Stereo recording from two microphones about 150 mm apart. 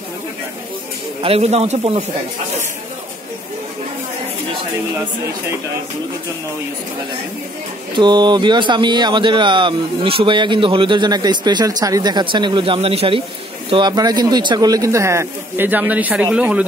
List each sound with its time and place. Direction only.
1.2 s speech: 45° right (ahead or behind)
7.9 s speech: 30° right (ahead or behind); by 16.6 s 5° right (ahead or behind)